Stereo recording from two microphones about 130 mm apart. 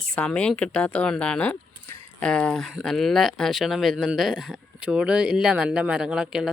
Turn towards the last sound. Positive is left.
turn(degrees=-5)  # may be behind; listen again after turning